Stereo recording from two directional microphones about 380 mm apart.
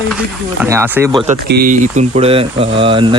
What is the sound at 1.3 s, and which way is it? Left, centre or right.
Speech, right.